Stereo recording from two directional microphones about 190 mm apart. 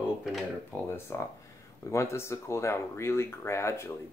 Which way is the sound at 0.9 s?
15° left (ahead or behind).